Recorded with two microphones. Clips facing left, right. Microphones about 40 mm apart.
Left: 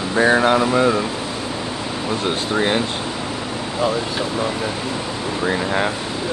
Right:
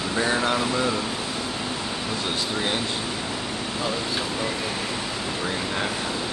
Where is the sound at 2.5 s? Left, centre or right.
Left.